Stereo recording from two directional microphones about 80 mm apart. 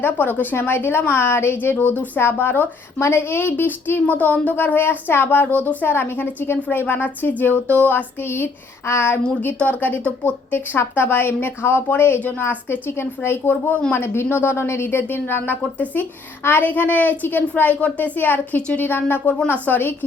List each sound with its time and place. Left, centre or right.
0.0 s speech: left
9.4 s speech: left